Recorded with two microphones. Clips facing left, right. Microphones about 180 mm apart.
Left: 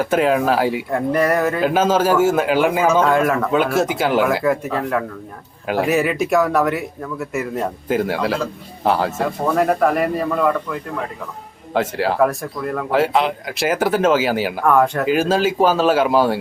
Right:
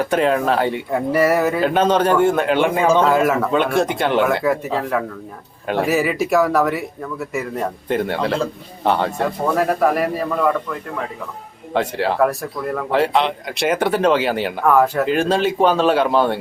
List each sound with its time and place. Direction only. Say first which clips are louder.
0.0 s speech: left 1 dB; centre (ahead or behind)